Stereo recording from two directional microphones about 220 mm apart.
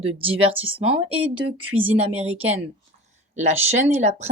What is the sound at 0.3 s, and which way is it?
Speech, 25° right (ahead or behind).